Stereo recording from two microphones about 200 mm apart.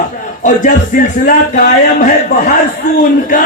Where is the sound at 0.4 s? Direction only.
40° left (ahead or behind).